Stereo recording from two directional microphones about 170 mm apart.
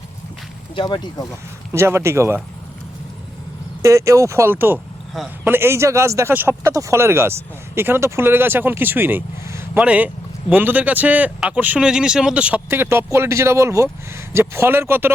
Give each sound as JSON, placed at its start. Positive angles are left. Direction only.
{"t": 0.8, "sound": "speech", "side_deg": 25}
{"t": 1.7, "sound": "speech", "side_deg": -15}
{"t": 3.8, "sound": "speech", "side_deg": -20}